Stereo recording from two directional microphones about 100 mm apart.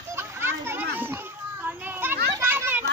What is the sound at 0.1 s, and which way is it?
Children playing, 25° right (ahead or behind).